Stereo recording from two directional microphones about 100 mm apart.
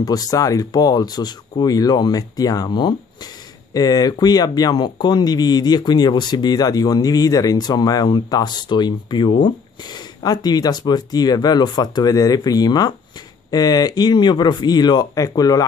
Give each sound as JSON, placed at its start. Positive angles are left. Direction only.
{"t": 0.0, "sound": "speech", "side_deg": 40}